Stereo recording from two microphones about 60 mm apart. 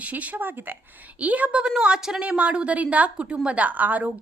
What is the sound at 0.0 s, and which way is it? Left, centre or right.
A woman's voice, right.